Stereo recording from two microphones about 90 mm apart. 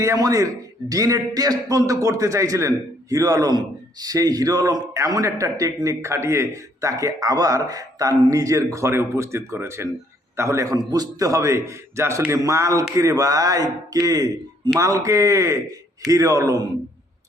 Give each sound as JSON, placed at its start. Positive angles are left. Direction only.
{"t": 0.0, "sound": "a man's voice", "side_deg": -35}